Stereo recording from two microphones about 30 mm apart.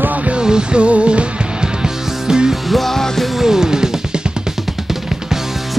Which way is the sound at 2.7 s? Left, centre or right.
Centre.